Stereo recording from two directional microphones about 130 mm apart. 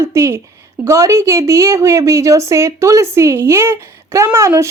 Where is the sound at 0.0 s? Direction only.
20° right (ahead or behind).